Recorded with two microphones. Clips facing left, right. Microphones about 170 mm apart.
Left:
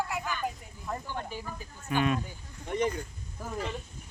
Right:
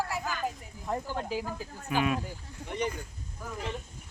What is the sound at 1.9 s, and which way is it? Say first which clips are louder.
Speech: left 1 dB; 5° right (ahead or behind).